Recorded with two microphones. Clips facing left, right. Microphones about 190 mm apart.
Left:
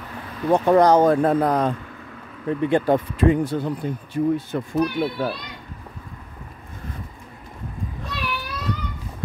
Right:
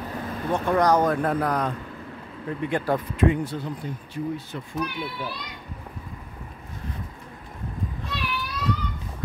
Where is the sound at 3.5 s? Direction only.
55° left (ahead or behind).